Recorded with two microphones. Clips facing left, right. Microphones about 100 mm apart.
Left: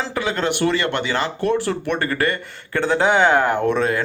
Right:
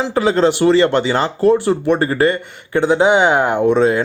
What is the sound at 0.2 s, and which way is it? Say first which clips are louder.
Speech: right 8 dB; 30° right (ahead or behind).